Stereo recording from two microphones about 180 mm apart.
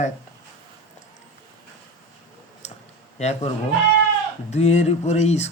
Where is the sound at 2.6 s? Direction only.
40° left (ahead or behind).